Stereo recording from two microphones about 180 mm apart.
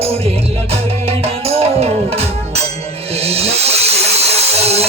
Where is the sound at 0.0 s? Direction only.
35° right (ahead or behind).